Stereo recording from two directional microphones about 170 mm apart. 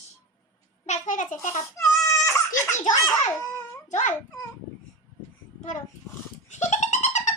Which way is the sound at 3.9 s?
45° left (ahead or behind).